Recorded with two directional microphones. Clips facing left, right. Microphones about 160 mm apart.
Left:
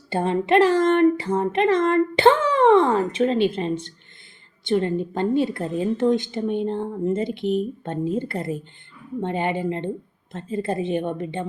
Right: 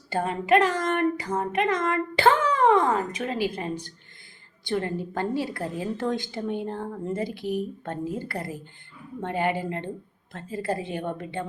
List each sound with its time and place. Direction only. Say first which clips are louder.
0.1 s a woman's voice: left 3 dB; 25° left (ahead or behind)